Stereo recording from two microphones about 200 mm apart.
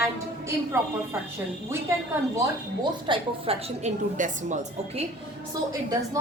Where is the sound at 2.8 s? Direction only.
25° right (ahead or behind).